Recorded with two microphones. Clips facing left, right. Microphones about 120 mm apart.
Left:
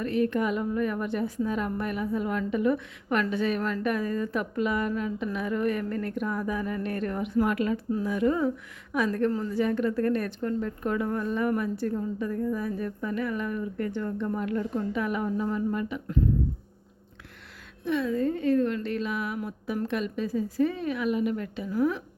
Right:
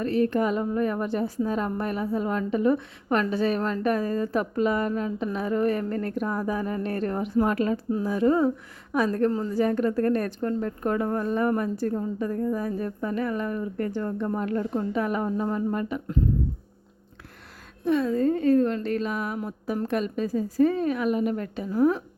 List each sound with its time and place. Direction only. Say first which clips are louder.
0.0 s a woman's voice: right 3 dB; 35° right (ahead or behind)
17.8 s a woman's voice: right 4 dB; 40° right (ahead or behind)